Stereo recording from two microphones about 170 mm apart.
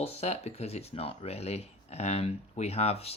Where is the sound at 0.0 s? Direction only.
35° left (ahead or behind).